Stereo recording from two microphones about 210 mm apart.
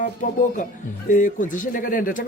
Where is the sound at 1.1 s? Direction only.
40° left (ahead or behind).